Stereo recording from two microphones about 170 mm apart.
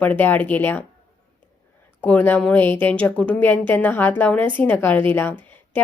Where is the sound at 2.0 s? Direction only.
10° left (ahead or behind).